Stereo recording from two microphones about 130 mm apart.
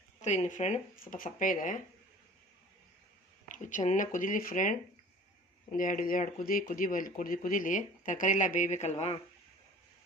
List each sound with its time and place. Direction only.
0.2 s speech: 65° left (ahead or behind); by 1.8 s 90° left
3.5 s speech: 80° left
5.7 s speech: 90° left; by 9.1 s 60° left (ahead or behind)